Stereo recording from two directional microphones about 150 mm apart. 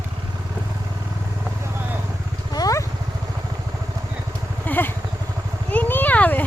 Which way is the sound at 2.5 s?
25° left (ahead or behind).